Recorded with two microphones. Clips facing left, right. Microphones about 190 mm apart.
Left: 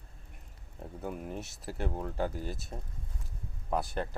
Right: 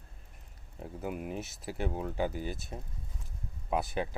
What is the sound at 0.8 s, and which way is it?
Speech, 5° right (ahead or behind).